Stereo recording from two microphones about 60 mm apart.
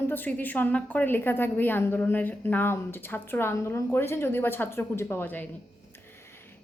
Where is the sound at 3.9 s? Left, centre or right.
Left.